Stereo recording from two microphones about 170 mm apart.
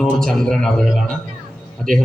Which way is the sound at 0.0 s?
Centre (ahead or behind).